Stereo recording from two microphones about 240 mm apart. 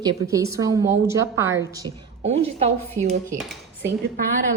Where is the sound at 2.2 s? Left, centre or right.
Right.